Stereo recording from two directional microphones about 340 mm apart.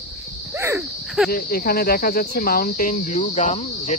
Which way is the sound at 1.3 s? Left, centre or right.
Left.